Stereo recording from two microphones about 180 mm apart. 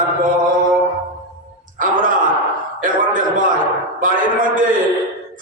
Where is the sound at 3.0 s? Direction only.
50° right (ahead or behind).